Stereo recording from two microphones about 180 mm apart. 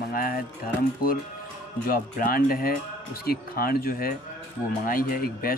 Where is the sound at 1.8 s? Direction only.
55° left (ahead or behind).